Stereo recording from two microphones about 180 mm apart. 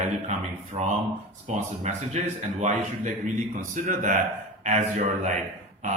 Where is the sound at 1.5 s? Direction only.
40° right (ahead or behind).